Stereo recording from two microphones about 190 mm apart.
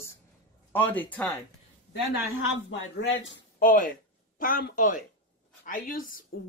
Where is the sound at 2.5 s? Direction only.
75° left (ahead or behind).